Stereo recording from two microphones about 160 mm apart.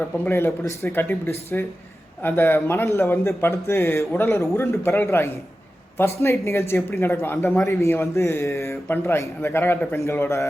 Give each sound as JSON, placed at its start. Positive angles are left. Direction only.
{"t": 0.3, "sound": "a man's voice", "side_deg": 15}